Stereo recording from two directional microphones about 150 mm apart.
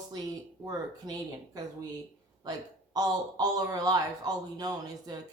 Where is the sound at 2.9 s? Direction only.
25° right (ahead or behind).